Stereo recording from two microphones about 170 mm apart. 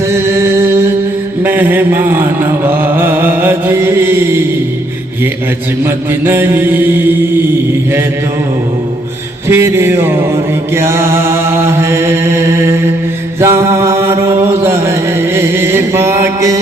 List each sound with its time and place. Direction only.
0.0 s music: 15° right (ahead or behind)
1.4 s mantra: 10° right (ahead or behind)
5.8 s mantra: 15° right (ahead or behind)
9.5 s mantra: 15° right (ahead or behind)
14.4 s chant: 15° right (ahead or behind)